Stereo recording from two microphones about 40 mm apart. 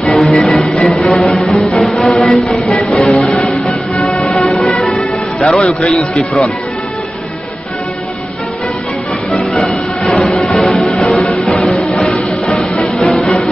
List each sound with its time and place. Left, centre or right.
0.2 s music: centre
2.2 s a sound: left
2.5 s music: centre
2.8 s music: left
3.4 s music: centre
4.8 s music: centre
9.3 s music: centre
10.0 s music: centre